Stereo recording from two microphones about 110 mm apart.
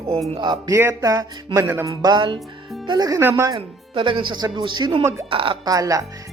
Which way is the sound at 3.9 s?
50° right (ahead or behind).